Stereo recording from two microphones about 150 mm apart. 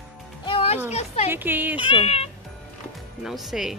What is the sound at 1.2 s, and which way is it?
Speech, 15° right (ahead or behind).